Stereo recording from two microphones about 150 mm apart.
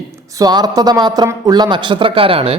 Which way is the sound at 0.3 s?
25° right (ahead or behind).